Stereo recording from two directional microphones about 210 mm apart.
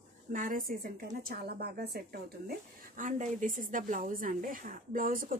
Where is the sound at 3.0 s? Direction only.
35° right (ahead or behind).